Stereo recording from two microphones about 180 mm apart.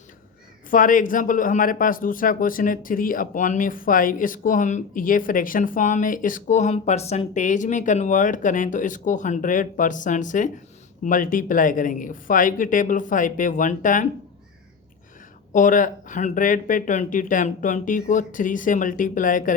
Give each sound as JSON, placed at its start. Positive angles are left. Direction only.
{"t": 0.7, "sound": "a man's voice", "side_deg": 50}
{"t": 15.5, "sound": "a man's voice", "side_deg": 45}